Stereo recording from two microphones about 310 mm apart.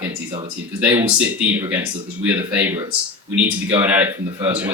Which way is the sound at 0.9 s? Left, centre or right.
Centre.